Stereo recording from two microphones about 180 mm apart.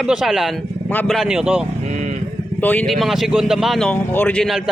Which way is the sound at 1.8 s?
40° right (ahead or behind).